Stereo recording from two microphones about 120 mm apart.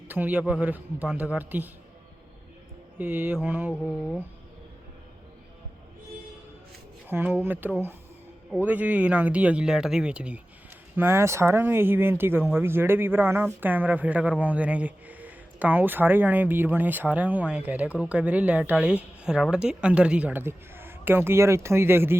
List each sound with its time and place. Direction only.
0.1 s speech: 15° right (ahead or behind)
3.0 s speech: 15° right (ahead or behind)
7.1 s speech: 15° right (ahead or behind)
10.9 s speech: 20° right (ahead or behind)